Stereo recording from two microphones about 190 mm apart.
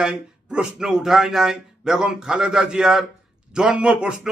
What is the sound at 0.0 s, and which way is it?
Speech, 5° right (ahead or behind).